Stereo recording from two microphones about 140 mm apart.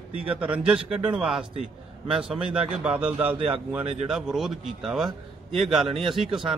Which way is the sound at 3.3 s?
40° right (ahead or behind).